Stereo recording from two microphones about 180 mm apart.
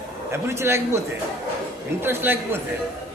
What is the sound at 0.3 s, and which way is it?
Speech, 15° right (ahead or behind).